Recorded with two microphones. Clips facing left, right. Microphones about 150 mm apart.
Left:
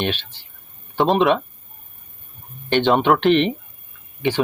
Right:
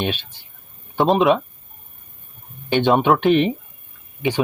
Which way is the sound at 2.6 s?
5° right (ahead or behind).